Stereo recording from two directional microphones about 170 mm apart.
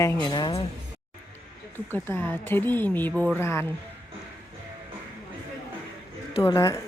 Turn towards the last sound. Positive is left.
turn(degrees=15)  # may be behind; listen again after turning